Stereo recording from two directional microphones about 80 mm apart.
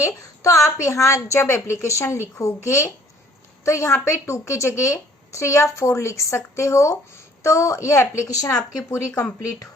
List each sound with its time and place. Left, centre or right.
0.0 s speech: left